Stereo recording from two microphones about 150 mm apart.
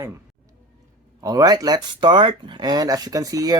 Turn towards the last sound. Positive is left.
turn(degrees=-25)  # may be behind; listen again after turning